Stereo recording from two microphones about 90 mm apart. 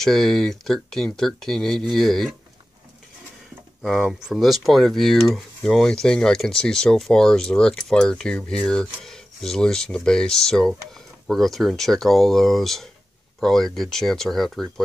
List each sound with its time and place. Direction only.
0.0 s speech: 5° left (ahead or behind)
3.8 s speech: centre (ahead or behind)